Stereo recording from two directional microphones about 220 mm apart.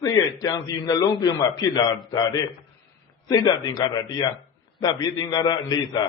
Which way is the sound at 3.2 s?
15° left (ahead or behind).